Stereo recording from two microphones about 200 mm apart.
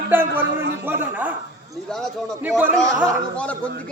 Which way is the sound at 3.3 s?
5° left (ahead or behind).